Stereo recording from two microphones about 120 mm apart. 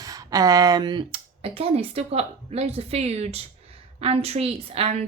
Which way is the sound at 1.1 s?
55° right (ahead or behind).